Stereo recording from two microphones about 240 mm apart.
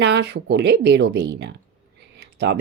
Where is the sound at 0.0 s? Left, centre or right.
Right.